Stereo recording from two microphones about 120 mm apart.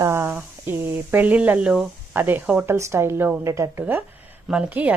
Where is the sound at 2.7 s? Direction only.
25° right (ahead or behind).